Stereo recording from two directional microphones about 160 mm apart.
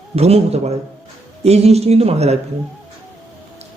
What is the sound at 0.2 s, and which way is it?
Speech, 40° right (ahead or behind).